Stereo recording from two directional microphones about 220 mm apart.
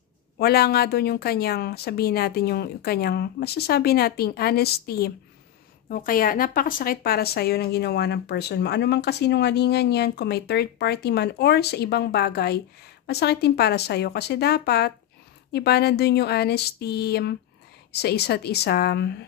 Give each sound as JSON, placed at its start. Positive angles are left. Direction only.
{"t": 0.4, "sound": "a woman's voice", "side_deg": 45}